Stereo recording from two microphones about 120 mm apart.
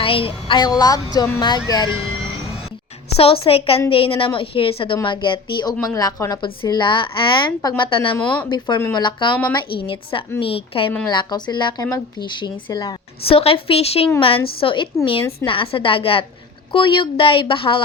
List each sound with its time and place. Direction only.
0.0 s speech: 50° left (ahead or behind)
3.2 s a woman's voice: 50° left (ahead or behind)
5.9 s speech: 30° left (ahead or behind)
6.4 s a woman's voice: 40° left (ahead or behind)
11.1 s speech: 40° left (ahead or behind)
12.2 s speech: 40° left (ahead or behind)
13.2 s a woman's voice: 55° left (ahead or behind)